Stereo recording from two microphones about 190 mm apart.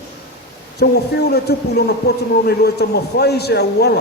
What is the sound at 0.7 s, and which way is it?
A man's voice, 60° left (ahead or behind).